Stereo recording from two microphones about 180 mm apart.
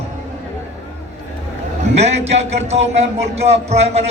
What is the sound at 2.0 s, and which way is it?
Speech, 35° right (ahead or behind).